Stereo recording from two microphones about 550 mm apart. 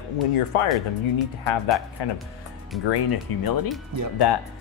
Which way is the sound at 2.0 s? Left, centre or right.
Left.